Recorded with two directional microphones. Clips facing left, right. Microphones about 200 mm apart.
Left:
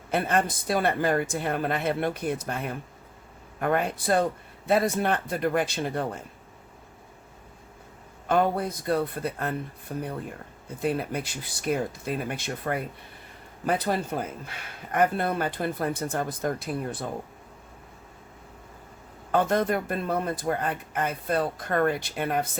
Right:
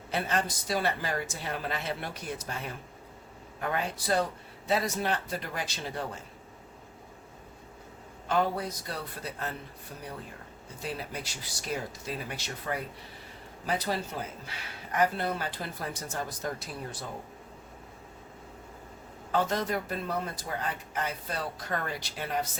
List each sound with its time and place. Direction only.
0.1 s speech: 55° left (ahead or behind)
8.3 s a man's voice: 55° left (ahead or behind)
19.3 s speech: 55° left (ahead or behind)